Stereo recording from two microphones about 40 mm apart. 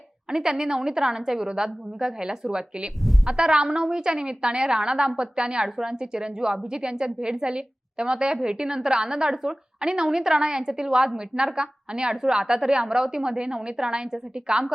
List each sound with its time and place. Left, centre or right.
0.3 s a woman's voice: centre